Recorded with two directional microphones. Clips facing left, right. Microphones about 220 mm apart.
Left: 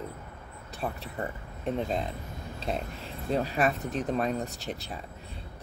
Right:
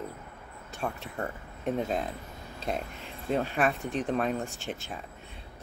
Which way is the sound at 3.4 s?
40° left (ahead or behind).